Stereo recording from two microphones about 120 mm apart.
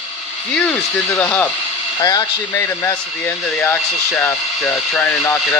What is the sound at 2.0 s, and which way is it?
Speech, 30° left (ahead or behind).